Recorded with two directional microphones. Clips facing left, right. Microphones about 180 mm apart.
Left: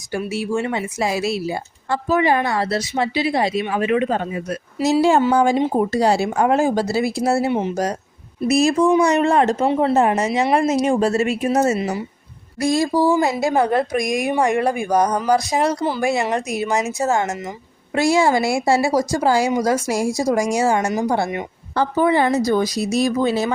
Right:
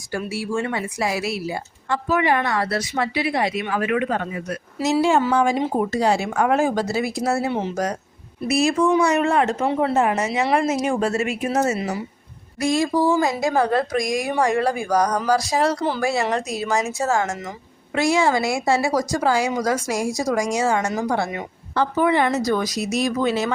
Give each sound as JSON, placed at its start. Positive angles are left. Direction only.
{"t": 0.3, "sound": "a woman's voice", "side_deg": 20}
{"t": 8.4, "sound": "speech", "side_deg": 40}
{"t": 10.4, "sound": "speech", "side_deg": 15}
{"t": 10.7, "sound": "speech", "side_deg": 35}
{"t": 13.1, "sound": "a woman's voice", "side_deg": 25}
{"t": 17.9, "sound": "a woman's voice", "side_deg": 30}